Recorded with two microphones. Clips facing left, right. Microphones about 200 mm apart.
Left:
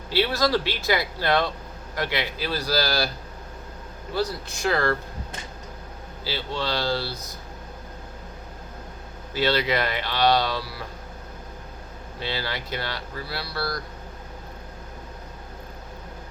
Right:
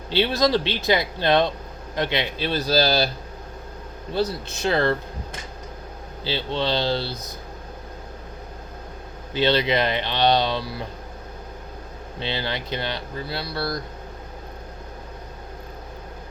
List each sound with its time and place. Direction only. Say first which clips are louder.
0.1 s speech: right 2 dB; 20° right (ahead or behind)
4.1 s speech: right 3 dB; 25° right (ahead or behind)
6.2 s speech: right 4 dB; 25° right (ahead or behind)
9.3 s speech: right 3 dB; 20° right (ahead or behind)
12.2 s speech: right 2 dB; 20° right (ahead or behind)